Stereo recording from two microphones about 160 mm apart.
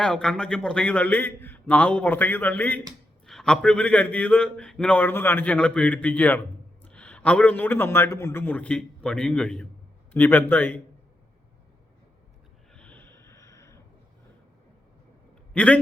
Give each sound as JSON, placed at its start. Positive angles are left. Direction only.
{"t": 0.0, "sound": "a man's voice", "side_deg": 5}
{"t": 12.7, "sound": "snort", "side_deg": 10}
{"t": 15.5, "sound": "a man's voice", "side_deg": 5}